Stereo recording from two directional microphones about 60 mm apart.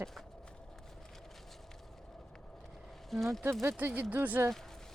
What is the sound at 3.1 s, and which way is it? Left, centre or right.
Speech, centre.